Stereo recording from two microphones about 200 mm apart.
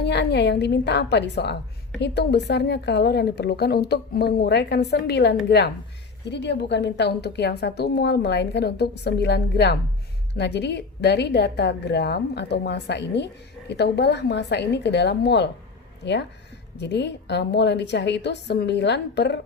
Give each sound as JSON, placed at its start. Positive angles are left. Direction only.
{"t": 0.0, "sound": "a woman's voice", "side_deg": 60}